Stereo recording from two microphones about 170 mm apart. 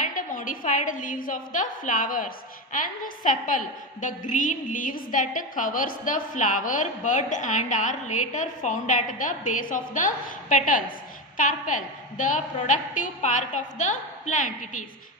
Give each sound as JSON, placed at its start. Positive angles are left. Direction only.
{"t": 0.0, "sound": "a woman's voice", "side_deg": 50}